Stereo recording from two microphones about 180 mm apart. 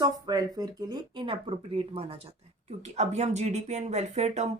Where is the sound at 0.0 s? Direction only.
20° right (ahead or behind).